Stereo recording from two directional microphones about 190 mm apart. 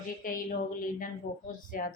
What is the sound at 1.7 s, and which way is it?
Speech, 45° left (ahead or behind).